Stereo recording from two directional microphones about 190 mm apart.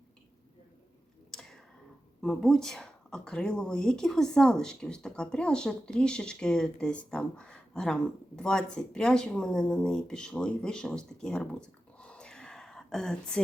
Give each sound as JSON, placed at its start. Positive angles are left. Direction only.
{"t": 1.3, "sound": "tick-tock", "side_deg": 0}
{"t": 2.2, "sound": "speech", "side_deg": 5}